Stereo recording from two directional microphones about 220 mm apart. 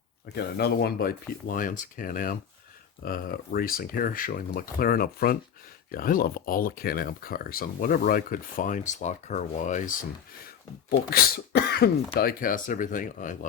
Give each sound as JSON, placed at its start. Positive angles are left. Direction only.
{"t": 0.3, "sound": "speech", "side_deg": 45}
{"t": 10.8, "sound": "speech", "side_deg": 45}